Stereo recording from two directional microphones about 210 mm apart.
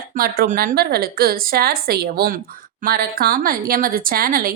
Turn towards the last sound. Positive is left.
turn(degrees=-45)  # may be behind; listen again after turning